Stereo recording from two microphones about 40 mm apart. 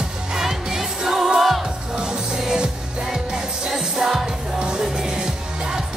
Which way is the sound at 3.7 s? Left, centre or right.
Centre.